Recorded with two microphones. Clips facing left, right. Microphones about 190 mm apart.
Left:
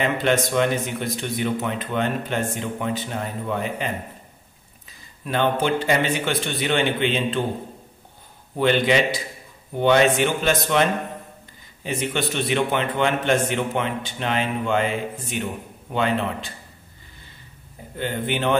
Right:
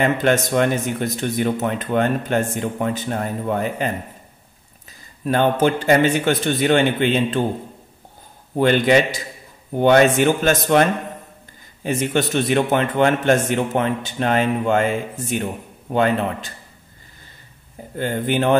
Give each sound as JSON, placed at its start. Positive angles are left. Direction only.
{"t": 0.0, "sound": "speech", "side_deg": -45}
{"t": 5.2, "sound": "speech", "side_deg": -45}
{"t": 8.5, "sound": "speech", "side_deg": -45}
{"t": 17.9, "sound": "speech", "side_deg": -40}